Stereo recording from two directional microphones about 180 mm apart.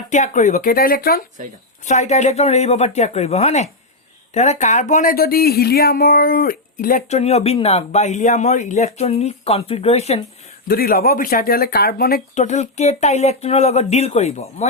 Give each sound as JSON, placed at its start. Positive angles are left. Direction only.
{"t": 0.1, "sound": "speech", "side_deg": 40}
{"t": 1.8, "sound": "speech", "side_deg": 40}
{"t": 10.7, "sound": "speech", "side_deg": 55}
{"t": 12.3, "sound": "speech", "side_deg": 40}